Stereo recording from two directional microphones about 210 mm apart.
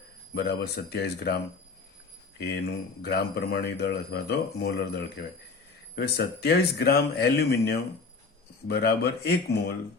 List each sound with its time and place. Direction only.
0.3 s speech: 50° left (ahead or behind)
2.6 s speech: 50° left (ahead or behind)